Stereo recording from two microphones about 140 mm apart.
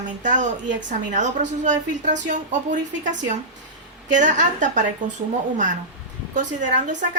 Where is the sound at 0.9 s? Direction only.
60° right (ahead or behind).